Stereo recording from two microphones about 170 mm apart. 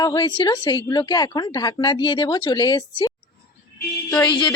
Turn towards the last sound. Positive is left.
turn(degrees=25)  # may be behind; listen again after turning